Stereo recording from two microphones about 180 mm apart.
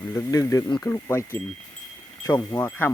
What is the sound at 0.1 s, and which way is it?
Speech, 15° left (ahead or behind).